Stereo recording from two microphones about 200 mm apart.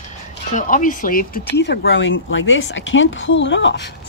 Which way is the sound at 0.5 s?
40° left (ahead or behind).